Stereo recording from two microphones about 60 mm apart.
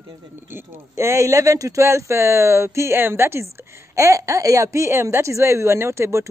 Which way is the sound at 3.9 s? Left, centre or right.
Right.